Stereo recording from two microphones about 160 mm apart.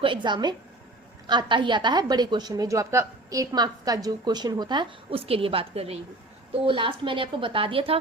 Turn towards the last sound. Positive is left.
turn(degrees=-35)  # may be behind; listen again after turning